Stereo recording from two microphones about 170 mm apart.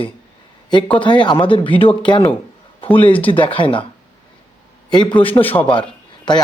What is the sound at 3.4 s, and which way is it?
Speech, 30° left (ahead or behind).